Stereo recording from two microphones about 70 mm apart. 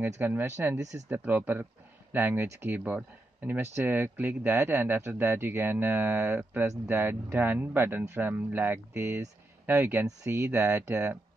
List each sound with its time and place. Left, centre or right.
0.0 s speech: right
3.7 s speech: right